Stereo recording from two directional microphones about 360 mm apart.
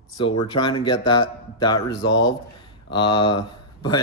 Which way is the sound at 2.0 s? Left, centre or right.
Left.